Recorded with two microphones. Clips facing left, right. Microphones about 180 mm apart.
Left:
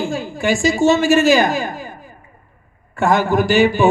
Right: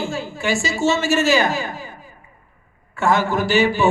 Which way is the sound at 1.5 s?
50° left (ahead or behind).